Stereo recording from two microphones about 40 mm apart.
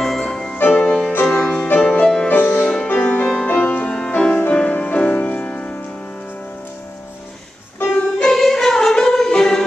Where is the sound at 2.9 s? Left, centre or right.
Left.